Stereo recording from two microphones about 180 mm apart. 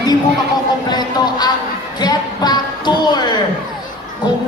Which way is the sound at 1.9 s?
25° left (ahead or behind).